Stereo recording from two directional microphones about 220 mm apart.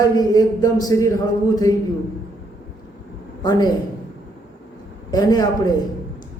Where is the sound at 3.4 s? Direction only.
15° left (ahead or behind).